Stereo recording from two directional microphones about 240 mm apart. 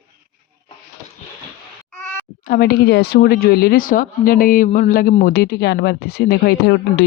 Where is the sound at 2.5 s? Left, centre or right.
Left.